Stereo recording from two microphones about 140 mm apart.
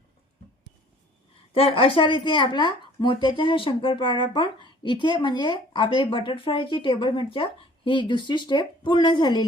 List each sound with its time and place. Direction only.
1.5 s speech: 40° left (ahead or behind)